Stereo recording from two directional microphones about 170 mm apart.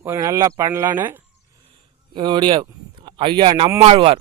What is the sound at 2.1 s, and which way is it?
Speech, 25° right (ahead or behind).